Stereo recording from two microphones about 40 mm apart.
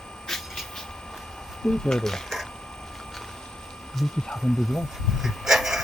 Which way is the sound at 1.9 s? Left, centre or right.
Centre.